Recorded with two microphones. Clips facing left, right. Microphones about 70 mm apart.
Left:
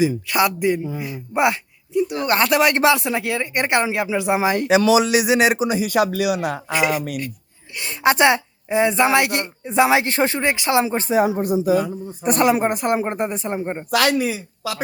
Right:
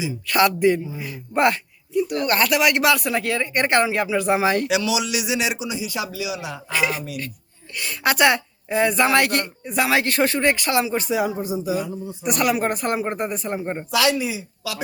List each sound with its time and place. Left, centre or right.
0.3 s speech: centre
0.9 s speech: left
2.0 s a woman's voice: left
3.2 s speech: centre
4.7 s a man's voice: left
6.7 s a woman's voice: centre
10.8 s speech: left
11.3 s a woman's voice: left
13.9 s a man's voice: left